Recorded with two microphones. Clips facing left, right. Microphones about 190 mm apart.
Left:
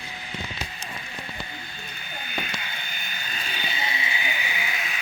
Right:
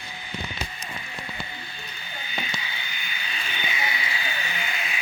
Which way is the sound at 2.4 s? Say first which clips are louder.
Right 1 dB; 50° left (ahead or behind).